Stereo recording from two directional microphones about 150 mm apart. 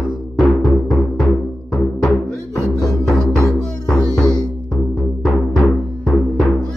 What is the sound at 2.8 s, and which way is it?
Music, centre (ahead or behind).